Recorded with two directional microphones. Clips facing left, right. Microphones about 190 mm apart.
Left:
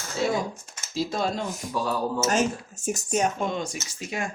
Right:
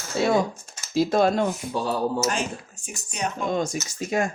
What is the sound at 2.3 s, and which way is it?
Speech, 45° left (ahead or behind).